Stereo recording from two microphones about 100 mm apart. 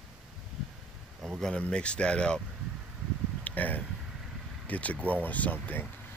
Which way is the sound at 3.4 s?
15° left (ahead or behind).